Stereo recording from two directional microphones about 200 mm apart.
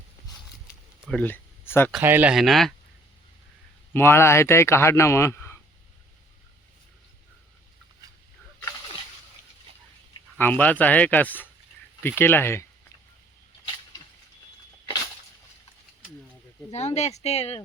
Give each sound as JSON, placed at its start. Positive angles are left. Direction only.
{"t": 1.0, "sound": "speech", "side_deg": 5}
{"t": 2.0, "sound": "speech", "side_deg": -10}
{"t": 3.9, "sound": "speech", "side_deg": 10}
{"t": 10.3, "sound": "speech", "side_deg": 10}
{"t": 16.7, "sound": "speech", "side_deg": 35}